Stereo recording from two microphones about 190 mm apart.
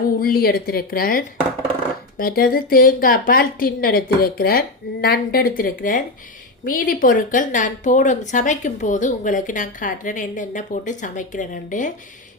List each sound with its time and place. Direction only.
0.2 s speech: 50° left (ahead or behind)